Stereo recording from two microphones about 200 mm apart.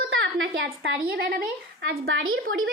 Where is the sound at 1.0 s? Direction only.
50° right (ahead or behind).